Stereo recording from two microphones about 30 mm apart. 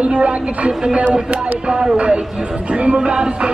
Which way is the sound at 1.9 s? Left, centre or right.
Right.